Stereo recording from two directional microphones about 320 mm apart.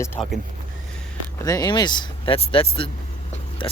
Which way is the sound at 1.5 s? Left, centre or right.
Centre.